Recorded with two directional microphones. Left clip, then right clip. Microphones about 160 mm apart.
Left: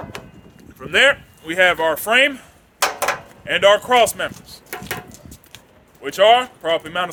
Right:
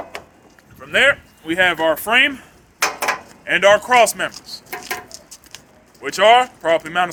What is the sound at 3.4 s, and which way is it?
Speech, 60° left (ahead or behind).